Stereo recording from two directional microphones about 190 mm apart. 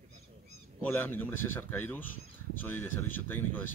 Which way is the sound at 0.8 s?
10° left (ahead or behind).